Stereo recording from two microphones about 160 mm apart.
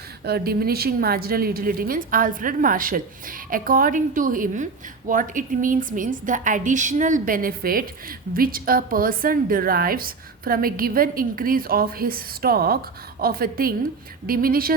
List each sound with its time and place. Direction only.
0.3 s a woman's voice: 75° right (ahead or behind)